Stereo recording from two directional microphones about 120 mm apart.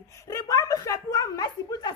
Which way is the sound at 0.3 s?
30° left (ahead or behind).